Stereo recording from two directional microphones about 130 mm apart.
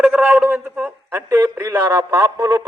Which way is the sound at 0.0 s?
10° right (ahead or behind).